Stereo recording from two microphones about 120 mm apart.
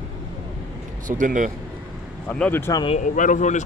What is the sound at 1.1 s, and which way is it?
Speech, 90° right.